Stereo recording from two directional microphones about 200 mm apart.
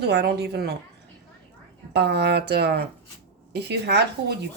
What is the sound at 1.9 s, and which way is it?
A woman's voice, 55° right (ahead or behind).